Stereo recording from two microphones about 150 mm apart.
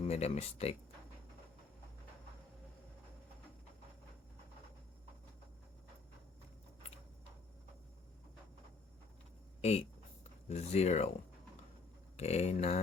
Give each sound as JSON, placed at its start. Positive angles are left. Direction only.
{"t": 0.0, "sound": "speech", "side_deg": 45}
{"t": 9.6, "sound": "speech", "side_deg": 45}
{"t": 12.1, "sound": "speech", "side_deg": 45}